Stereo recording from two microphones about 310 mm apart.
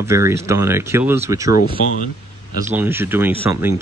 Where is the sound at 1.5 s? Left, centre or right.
Left.